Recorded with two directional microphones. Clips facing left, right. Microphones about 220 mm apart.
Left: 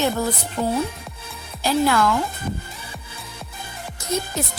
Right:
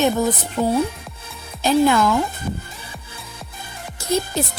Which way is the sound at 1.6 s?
20° right (ahead or behind).